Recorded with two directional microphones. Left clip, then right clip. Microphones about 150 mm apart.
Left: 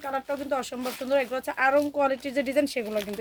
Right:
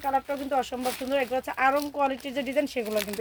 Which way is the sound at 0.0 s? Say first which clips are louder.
Right 3 dB; 35° left (ahead or behind).